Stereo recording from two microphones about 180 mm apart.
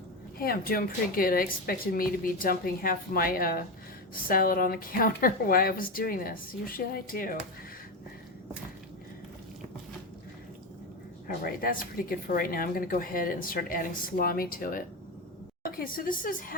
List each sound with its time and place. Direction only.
0.3 s speech: 55° left (ahead or behind)
11.3 s speech: 50° left (ahead or behind)